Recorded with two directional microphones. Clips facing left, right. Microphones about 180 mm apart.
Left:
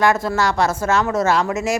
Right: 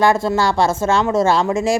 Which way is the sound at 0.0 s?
30° right (ahead or behind).